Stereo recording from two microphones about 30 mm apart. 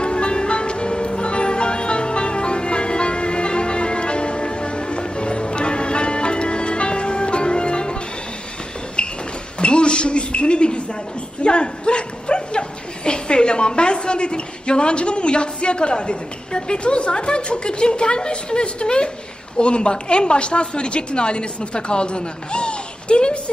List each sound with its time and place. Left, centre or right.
0.0 s music: left
9.0 s a sound: left
11.4 s bow-wow: left
13.1 s a woman's voice: left